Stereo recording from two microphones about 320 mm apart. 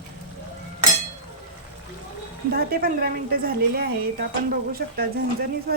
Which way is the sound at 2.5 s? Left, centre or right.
Right.